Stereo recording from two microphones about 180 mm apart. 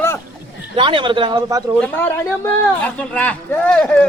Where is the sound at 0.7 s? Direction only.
30° right (ahead or behind).